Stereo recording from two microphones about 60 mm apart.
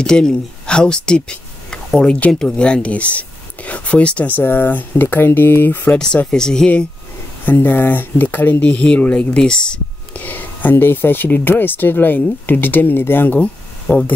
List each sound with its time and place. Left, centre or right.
0.0 s speech: centre
4.4 s speech: left
6.3 s speech: centre
7.4 s speech: left; by 9.8 s centre
10.1 s speech: left
13.4 s a sound: centre